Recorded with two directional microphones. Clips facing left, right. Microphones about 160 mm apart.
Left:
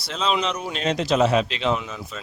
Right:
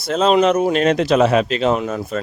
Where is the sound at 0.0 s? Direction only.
50° right (ahead or behind).